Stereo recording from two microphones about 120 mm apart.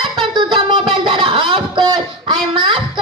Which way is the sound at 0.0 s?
40° right (ahead or behind).